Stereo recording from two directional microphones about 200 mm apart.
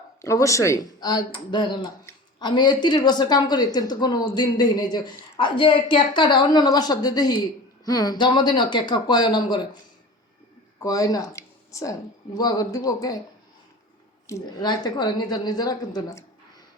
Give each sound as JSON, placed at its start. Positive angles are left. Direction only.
{"t": 0.2, "sound": "speech", "side_deg": 15}
{"t": 10.8, "sound": "speech", "side_deg": 15}
{"t": 14.3, "sound": "speech", "side_deg": 20}